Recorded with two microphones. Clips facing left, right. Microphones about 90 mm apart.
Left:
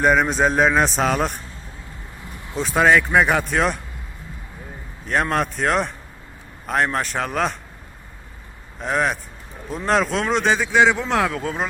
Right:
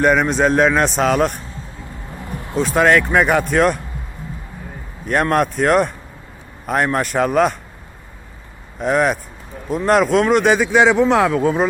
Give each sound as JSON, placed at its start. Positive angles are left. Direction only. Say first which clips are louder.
{"t": 0.0, "sound": "a man's voice", "louder": "right 2 dB", "side_deg": 0}
{"t": 2.6, "sound": "a man's voice", "louder": "right 2 dB", "side_deg": 0}
{"t": 5.0, "sound": "a man's voice", "louder": "right 5 dB", "side_deg": -5}
{"t": 8.8, "sound": "a man's voice", "louder": "right 5 dB", "side_deg": -5}